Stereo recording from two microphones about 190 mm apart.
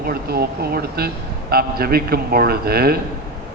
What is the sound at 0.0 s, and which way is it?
Speech, 55° right (ahead or behind).